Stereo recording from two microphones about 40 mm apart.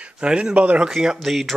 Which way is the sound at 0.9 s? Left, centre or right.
Centre.